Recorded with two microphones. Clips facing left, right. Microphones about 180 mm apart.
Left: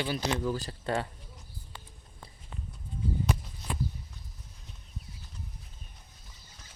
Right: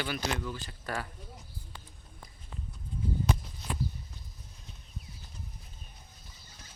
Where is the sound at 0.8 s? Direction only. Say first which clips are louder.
Left 5 dB; 25° left (ahead or behind).